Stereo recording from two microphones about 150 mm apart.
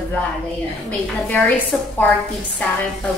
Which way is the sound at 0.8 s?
5° left (ahead or behind).